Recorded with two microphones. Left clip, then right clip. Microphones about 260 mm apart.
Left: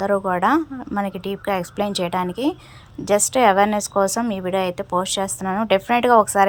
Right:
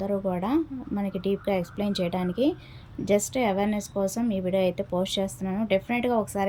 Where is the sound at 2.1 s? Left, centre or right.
Left.